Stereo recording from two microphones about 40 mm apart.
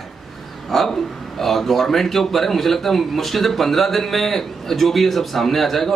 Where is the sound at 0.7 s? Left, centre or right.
Centre.